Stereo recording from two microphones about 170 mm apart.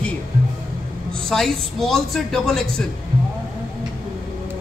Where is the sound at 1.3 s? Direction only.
Centre (ahead or behind).